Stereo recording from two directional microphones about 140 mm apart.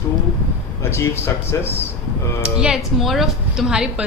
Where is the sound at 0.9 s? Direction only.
15° left (ahead or behind).